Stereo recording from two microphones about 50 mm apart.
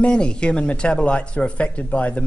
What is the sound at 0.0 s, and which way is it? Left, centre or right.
Speech, centre.